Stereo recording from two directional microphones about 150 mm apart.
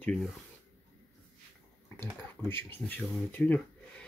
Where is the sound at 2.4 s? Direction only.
15° left (ahead or behind).